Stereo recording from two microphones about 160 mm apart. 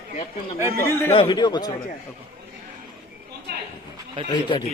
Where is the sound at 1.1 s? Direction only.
30° left (ahead or behind).